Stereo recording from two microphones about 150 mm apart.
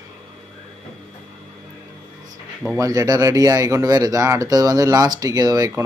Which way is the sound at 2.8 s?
20° right (ahead or behind).